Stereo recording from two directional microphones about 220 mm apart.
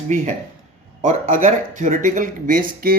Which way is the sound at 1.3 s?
35° right (ahead or behind).